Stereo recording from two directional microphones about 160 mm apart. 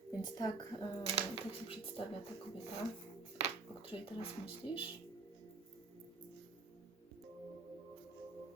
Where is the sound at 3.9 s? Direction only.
35° left (ahead or behind).